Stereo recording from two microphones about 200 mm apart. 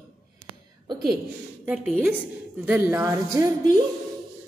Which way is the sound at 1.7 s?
5° right (ahead or behind).